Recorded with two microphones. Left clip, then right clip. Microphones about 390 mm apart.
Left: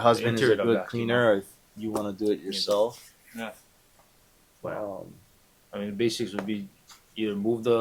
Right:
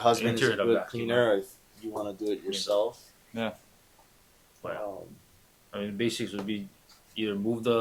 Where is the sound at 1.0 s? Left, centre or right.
Left.